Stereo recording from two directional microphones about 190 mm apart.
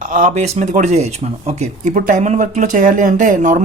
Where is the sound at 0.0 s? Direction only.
40° right (ahead or behind).